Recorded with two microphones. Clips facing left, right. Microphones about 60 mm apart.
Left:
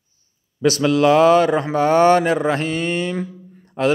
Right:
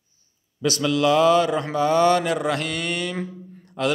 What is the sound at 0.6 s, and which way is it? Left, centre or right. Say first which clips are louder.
A man's voice: left 5 dB; left.